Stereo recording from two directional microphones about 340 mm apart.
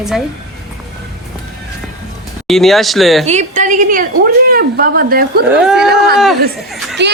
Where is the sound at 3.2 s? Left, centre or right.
Right.